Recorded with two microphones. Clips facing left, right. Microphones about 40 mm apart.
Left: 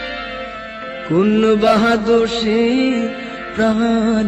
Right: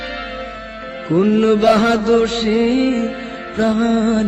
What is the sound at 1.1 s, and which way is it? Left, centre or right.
Music, left.